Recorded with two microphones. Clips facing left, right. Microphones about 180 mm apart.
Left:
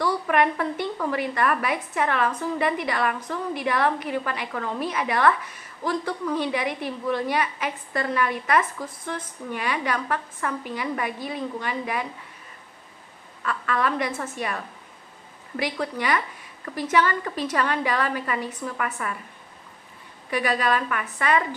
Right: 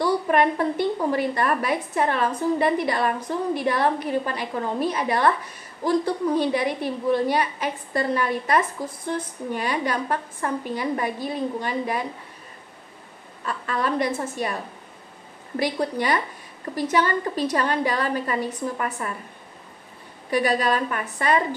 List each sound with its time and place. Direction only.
0.0 s a woman's voice: 35° right (ahead or behind)
13.4 s a woman's voice: 35° right (ahead or behind)
20.2 s a woman's voice: 35° right (ahead or behind)